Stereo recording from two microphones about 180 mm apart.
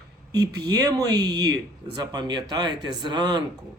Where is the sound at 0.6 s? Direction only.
20° right (ahead or behind).